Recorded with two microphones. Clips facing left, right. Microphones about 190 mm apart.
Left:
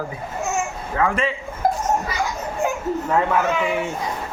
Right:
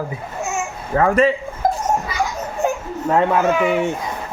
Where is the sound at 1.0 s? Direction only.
40° right (ahead or behind).